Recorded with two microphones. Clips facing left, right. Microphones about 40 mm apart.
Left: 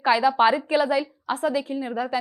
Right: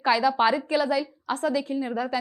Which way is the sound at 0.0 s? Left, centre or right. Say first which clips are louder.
Left 3 dB; centre.